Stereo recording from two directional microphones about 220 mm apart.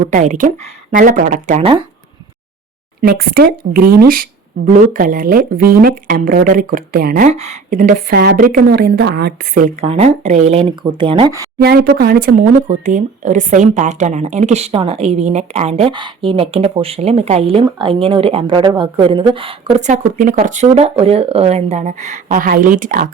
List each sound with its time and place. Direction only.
0.1 s speech: 35° right (ahead or behind)
3.0 s speech: 45° right (ahead or behind)
7.3 s speech: 30° right (ahead or behind)
9.8 s speech: 25° right (ahead or behind)
11.6 s speech: 45° right (ahead or behind)